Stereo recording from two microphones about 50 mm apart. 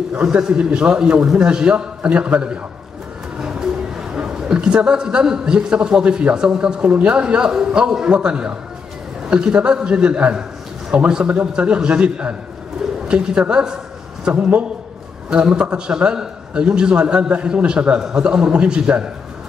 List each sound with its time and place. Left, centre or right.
0.2 s a man's voice: centre
1.5 s a man's voice: right
3.3 s a sound: centre
4.1 s a man's voice: centre